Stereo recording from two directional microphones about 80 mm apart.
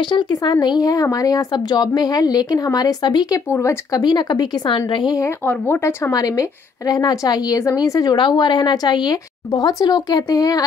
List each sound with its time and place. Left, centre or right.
0.1 s a woman's voice: left
5.5 s speech: left
6.1 s a woman's voice: left